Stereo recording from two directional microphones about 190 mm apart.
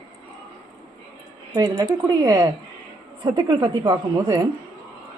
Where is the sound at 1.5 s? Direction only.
15° right (ahead or behind).